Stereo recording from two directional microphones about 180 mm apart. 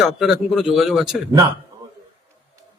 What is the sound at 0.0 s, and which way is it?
Speech, centre (ahead or behind).